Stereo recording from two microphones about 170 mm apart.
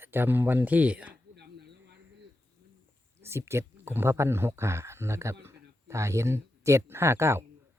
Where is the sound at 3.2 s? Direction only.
15° right (ahead or behind).